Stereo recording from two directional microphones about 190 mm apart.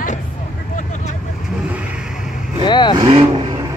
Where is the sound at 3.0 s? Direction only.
25° right (ahead or behind).